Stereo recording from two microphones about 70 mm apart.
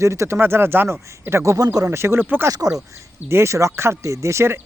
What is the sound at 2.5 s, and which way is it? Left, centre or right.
Speech, right.